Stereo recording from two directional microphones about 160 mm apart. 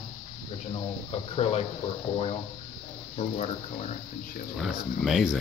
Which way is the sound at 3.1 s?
45° left (ahead or behind).